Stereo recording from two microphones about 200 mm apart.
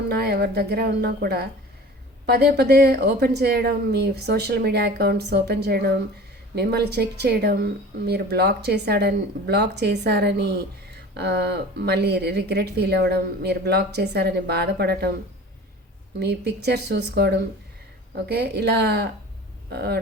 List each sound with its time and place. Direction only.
0.2 s a woman's voice: 55° right (ahead or behind)
16.2 s a woman's voice: 55° right (ahead or behind)